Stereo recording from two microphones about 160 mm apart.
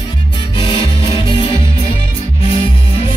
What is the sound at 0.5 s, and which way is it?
Music, 30° left (ahead or behind).